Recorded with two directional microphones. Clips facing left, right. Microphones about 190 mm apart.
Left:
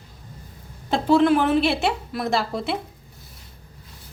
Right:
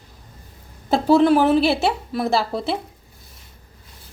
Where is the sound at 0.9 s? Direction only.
40° right (ahead or behind).